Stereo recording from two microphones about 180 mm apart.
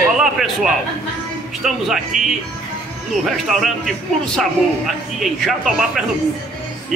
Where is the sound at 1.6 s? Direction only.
Centre (ahead or behind).